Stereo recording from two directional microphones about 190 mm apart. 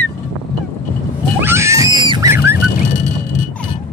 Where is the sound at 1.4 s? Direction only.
15° right (ahead or behind).